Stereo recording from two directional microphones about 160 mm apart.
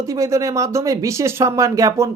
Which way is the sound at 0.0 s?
20° right (ahead or behind).